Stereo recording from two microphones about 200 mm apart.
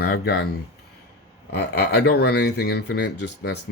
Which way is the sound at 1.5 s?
55° left (ahead or behind).